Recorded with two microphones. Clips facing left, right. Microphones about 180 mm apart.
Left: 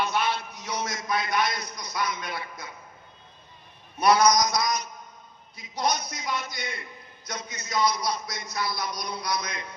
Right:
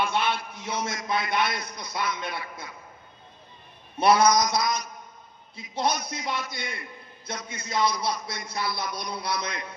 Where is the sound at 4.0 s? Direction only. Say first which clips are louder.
Right 1 dB; 25° right (ahead or behind).